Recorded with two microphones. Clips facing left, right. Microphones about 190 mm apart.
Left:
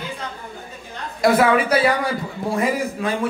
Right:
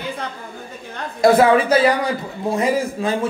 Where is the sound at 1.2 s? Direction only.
30° right (ahead or behind).